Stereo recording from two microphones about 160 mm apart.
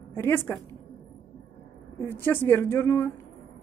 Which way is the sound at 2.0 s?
15° left (ahead or behind).